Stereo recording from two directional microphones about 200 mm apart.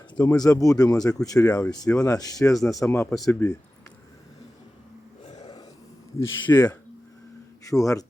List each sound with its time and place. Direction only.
0.3 s speech: 15° left (ahead or behind)
3.1 s speech: centre (ahead or behind)
5.3 s burping: 20° left (ahead or behind)
6.1 s speech: 10° left (ahead or behind)